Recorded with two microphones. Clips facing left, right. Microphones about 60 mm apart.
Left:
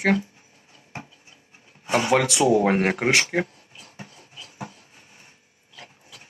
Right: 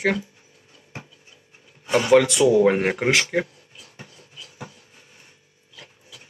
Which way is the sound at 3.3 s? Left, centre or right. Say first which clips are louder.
Right 1 dB; left.